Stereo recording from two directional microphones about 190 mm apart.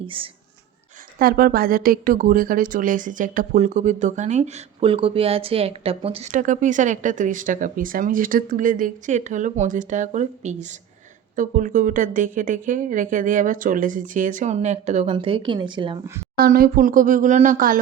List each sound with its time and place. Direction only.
0.0 s speech: 25° right (ahead or behind)
1.2 s a woman's voice: 50° right (ahead or behind); by 16.0 s 25° right (ahead or behind)
16.4 s a woman's voice: 50° right (ahead or behind)